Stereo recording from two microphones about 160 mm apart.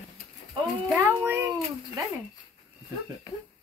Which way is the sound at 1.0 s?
15° right (ahead or behind).